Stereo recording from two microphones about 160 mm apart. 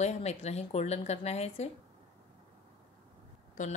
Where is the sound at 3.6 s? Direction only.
55° left (ahead or behind).